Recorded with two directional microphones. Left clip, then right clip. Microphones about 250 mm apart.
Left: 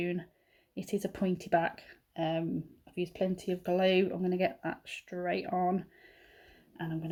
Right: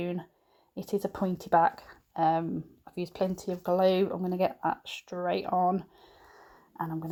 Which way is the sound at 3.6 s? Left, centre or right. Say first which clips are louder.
Right 3 dB; right.